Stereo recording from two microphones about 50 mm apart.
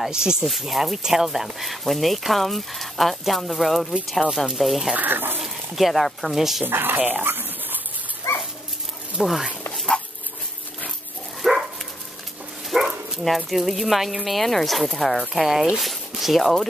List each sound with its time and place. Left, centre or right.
0.0 s speech: centre
0.5 s speech: centre
4.9 s speech: right
5.4 s speech: centre
6.6 s speech: right
7.2 s a sound: right
8.3 s dog: left
9.2 s speech: centre
11.4 s dog: centre
12.6 s bow-wow: centre
13.5 s speech: centre